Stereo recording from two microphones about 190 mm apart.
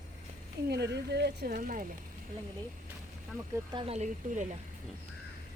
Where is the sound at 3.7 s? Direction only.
30° right (ahead or behind).